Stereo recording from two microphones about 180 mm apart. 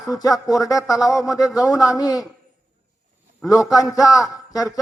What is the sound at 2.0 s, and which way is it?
Speech, 20° left (ahead or behind).